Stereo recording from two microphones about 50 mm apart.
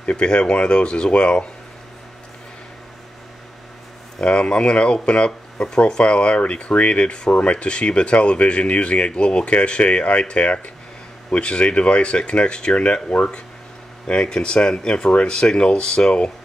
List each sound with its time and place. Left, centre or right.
0.0 s speech: left
4.2 s speech: centre